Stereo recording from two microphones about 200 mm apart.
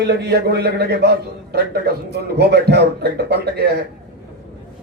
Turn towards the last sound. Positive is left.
turn(degrees=-50)  # may be behind; listen again after turning